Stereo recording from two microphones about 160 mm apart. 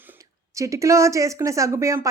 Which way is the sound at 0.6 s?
20° right (ahead or behind).